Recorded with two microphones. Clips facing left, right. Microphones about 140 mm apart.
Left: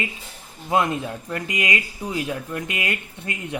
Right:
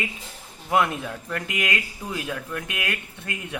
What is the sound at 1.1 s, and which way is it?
Speech, 15° left (ahead or behind).